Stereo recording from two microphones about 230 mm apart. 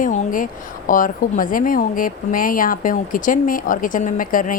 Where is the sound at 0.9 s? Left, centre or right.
Left.